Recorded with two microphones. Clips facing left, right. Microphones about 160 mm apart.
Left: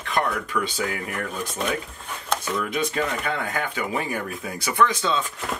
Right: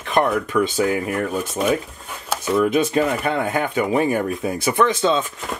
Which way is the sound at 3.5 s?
25° right (ahead or behind).